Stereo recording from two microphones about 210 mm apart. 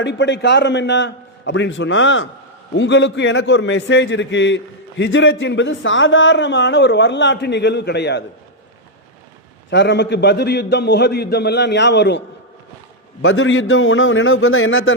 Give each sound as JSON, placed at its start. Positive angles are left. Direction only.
{"t": 0.0, "sound": "a man's voice", "side_deg": 60}
{"t": 9.6, "sound": "a man's voice", "side_deg": 55}
{"t": 13.2, "sound": "a man's voice", "side_deg": 65}